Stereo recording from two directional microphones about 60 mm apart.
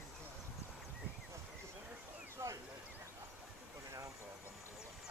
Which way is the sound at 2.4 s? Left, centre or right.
Right.